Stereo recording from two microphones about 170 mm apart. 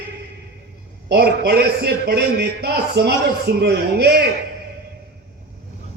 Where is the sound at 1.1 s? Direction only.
70° right (ahead or behind).